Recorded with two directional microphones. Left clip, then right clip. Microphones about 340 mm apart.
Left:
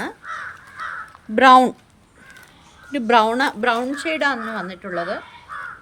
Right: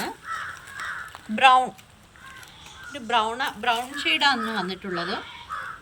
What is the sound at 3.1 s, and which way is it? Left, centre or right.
A woman's voice, left.